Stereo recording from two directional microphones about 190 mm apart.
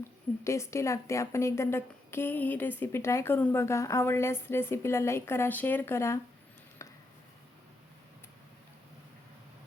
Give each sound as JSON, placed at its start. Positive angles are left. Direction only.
{"t": 0.4, "sound": "a woman's voice", "side_deg": 15}